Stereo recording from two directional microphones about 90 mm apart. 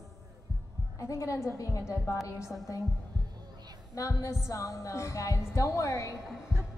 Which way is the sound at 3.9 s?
35° left (ahead or behind).